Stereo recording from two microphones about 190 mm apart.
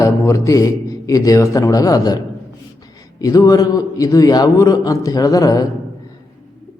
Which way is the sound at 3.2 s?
15° left (ahead or behind).